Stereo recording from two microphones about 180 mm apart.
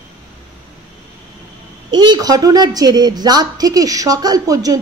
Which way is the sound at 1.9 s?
25° right (ahead or behind).